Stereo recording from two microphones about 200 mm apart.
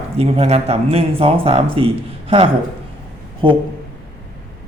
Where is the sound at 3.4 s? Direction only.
25° right (ahead or behind).